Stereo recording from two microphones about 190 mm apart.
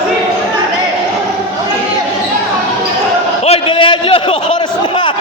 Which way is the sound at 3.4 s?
30° left (ahead or behind).